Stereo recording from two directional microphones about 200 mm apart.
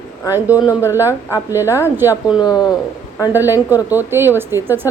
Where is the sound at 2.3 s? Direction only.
20° left (ahead or behind).